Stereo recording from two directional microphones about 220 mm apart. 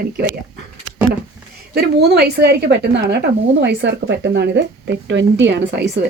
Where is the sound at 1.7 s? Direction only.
45° right (ahead or behind).